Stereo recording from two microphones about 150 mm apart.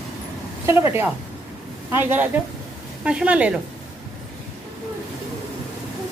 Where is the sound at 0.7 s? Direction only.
15° right (ahead or behind).